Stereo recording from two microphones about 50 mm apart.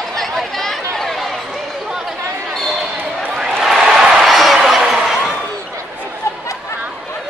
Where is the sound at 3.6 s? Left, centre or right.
Centre.